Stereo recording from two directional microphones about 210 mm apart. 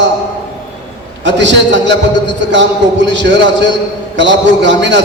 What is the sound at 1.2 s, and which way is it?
Speech, 60° right (ahead or behind).